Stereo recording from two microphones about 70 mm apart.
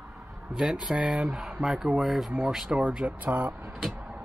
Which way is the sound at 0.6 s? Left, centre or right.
Centre.